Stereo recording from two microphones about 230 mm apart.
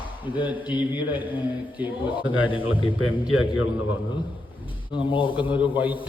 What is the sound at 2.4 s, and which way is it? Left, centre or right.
Speech, left.